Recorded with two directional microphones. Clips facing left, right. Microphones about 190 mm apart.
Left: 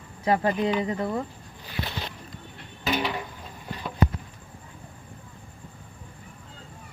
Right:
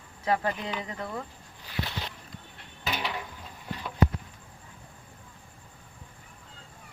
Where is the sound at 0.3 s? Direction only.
15° left (ahead or behind).